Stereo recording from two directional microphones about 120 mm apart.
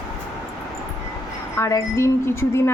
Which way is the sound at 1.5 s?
25° left (ahead or behind).